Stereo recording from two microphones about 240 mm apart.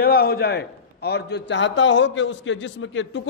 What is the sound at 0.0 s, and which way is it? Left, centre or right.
A man's voice, left.